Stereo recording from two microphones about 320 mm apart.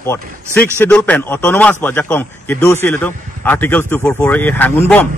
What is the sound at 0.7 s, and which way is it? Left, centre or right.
A man's voice, centre.